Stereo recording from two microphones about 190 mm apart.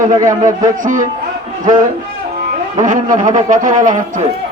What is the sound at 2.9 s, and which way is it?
A man's voice, 45° right (ahead or behind).